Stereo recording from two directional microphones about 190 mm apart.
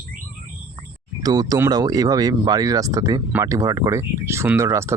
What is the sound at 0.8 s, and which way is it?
Speech, 20° right (ahead or behind).